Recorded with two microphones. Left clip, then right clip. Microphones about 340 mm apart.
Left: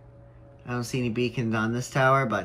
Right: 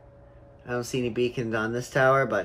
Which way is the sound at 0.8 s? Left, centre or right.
Centre.